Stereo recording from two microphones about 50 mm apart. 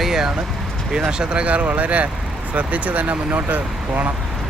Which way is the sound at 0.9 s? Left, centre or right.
Centre.